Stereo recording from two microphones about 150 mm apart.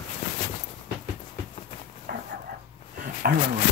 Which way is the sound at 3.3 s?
60° right (ahead or behind).